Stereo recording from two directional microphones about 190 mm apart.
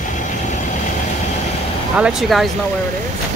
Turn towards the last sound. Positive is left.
turn(degrees=0)  # may be behind; listen again after turning